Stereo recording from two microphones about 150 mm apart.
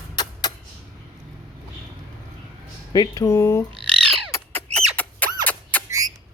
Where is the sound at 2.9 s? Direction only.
25° left (ahead or behind).